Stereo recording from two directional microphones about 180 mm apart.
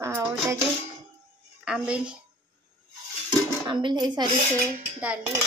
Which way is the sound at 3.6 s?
25° right (ahead or behind).